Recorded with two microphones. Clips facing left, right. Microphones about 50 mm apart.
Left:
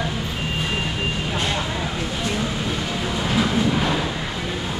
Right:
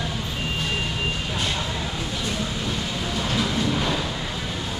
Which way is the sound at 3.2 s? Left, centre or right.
Centre.